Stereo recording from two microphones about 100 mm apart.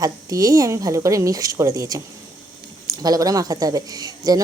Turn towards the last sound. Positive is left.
turn(degrees=-40)  # may be behind; listen again after turning